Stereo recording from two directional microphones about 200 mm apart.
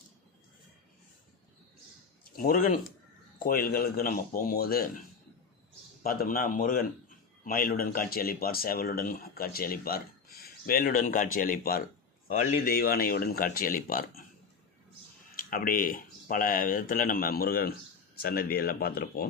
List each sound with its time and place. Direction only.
2.3 s speech: 45° left (ahead or behind)
6.0 s speech: 45° left (ahead or behind)
15.4 s speech: 45° left (ahead or behind)